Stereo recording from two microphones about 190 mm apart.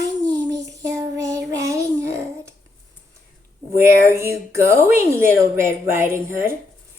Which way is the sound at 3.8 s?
15° right (ahead or behind).